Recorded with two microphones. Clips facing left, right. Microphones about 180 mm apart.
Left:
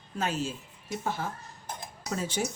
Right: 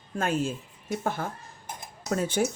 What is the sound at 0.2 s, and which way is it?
A woman's voice, 55° right (ahead or behind).